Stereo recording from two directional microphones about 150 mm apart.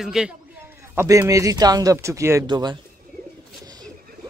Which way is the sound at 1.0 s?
20° right (ahead or behind).